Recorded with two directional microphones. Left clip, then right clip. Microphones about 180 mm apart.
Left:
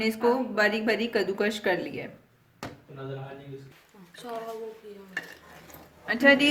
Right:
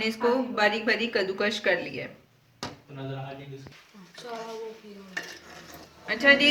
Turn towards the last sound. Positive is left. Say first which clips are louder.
# right 1 dB
turn(degrees=50)  # may be behind; listen again after turning